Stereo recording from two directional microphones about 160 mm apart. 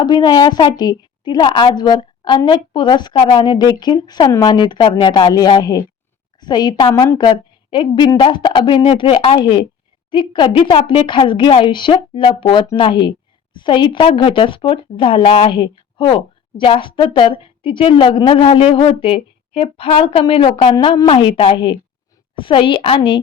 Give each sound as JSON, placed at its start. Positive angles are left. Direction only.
{"t": 0.0, "sound": "a woman's voice", "side_deg": 25}